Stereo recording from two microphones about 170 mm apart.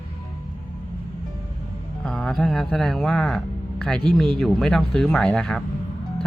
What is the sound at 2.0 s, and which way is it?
A man's voice, centre (ahead or behind).